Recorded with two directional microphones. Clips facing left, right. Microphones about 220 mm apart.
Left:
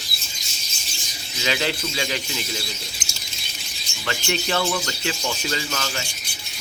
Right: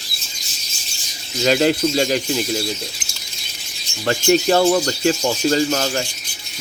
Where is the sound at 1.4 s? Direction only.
45° right (ahead or behind).